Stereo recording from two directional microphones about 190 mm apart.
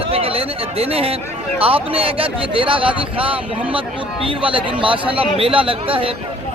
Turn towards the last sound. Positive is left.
turn(degrees=-30)  # may be behind; listen again after turning